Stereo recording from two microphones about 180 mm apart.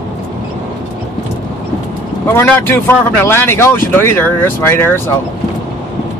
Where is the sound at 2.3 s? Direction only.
10° left (ahead or behind).